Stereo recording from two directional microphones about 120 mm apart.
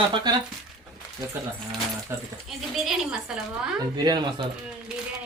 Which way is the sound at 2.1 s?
25° right (ahead or behind).